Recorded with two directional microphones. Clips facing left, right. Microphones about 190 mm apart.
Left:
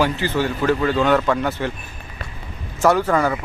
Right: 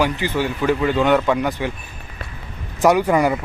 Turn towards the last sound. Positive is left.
turn(degrees=-15)  # may be behind; listen again after turning